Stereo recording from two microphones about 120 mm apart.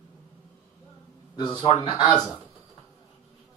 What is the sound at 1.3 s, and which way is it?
Speech, 40° left (ahead or behind).